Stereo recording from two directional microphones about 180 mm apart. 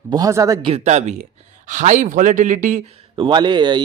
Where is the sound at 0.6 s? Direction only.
35° right (ahead or behind).